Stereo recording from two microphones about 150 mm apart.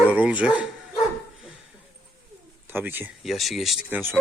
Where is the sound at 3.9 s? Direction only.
15° right (ahead or behind).